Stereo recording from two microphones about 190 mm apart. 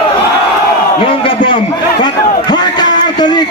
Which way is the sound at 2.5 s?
20° left (ahead or behind).